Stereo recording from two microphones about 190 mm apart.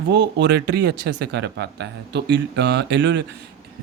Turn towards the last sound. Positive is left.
turn(degrees=-65)  # may be behind; listen again after turning